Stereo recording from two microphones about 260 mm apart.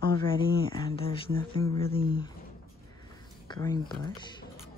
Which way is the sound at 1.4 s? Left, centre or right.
Centre.